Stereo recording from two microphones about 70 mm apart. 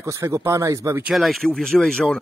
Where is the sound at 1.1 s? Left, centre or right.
Centre.